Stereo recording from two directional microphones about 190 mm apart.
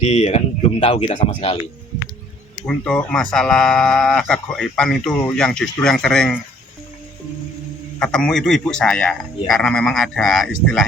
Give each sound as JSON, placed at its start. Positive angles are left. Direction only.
{"t": 0.0, "sound": "speech", "side_deg": 35}
{"t": 2.6, "sound": "speech", "side_deg": 5}
{"t": 7.9, "sound": "speech", "side_deg": 5}